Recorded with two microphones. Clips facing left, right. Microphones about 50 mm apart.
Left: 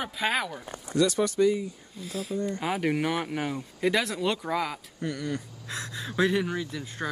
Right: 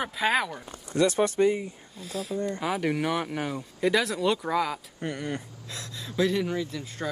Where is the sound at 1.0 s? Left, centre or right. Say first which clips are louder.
Right 1 dB; right.